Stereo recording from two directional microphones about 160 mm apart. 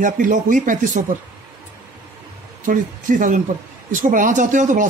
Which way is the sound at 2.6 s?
55° right (ahead or behind).